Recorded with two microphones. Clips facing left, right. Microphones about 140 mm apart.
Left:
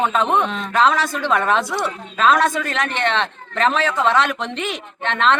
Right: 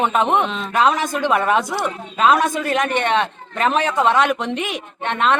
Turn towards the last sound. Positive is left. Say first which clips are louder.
# even
turn(degrees=-15)  # may be behind; listen again after turning